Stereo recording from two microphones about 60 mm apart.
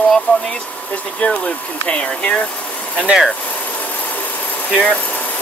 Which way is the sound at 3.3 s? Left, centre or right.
Left.